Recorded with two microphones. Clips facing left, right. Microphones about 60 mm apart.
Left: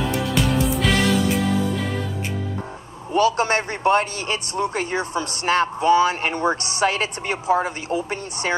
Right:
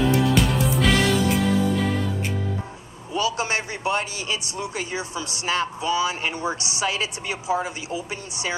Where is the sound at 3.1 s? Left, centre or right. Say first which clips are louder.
Left 6 dB; left.